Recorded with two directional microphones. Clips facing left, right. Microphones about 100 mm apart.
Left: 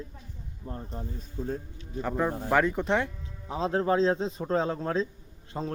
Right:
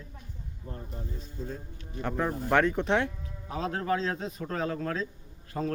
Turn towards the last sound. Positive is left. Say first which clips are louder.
# right 2 dB
turn(degrees=15)  # may be behind; listen again after turning